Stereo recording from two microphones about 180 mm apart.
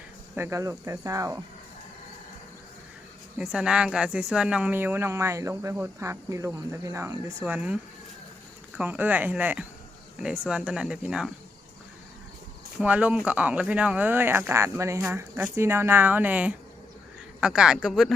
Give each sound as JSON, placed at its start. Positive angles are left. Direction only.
{"t": 0.3, "sound": "speech", "side_deg": -15}
{"t": 3.3, "sound": "speech", "side_deg": -5}
{"t": 8.8, "sound": "speech", "side_deg": -10}
{"t": 12.8, "sound": "speech", "side_deg": -10}